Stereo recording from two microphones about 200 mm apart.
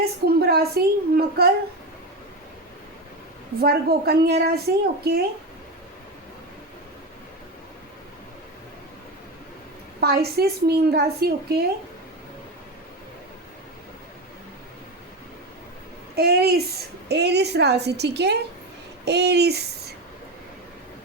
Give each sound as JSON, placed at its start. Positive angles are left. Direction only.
{"t": 0.3, "sound": "speech", "side_deg": -50}
{"t": 3.6, "sound": "speech", "side_deg": -50}
{"t": 10.0, "sound": "speech", "side_deg": -50}
{"t": 16.1, "sound": "a woman's voice", "side_deg": -55}